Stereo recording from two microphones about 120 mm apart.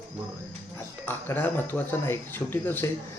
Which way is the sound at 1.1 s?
20° left (ahead or behind).